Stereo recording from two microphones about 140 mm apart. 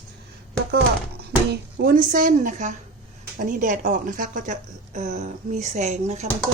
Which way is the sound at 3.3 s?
70° right (ahead or behind).